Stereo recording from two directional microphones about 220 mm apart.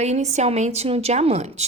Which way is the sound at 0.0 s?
30° right (ahead or behind).